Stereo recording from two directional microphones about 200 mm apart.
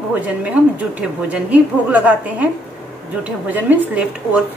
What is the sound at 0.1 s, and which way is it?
A woman's voice, 5° right (ahead or behind).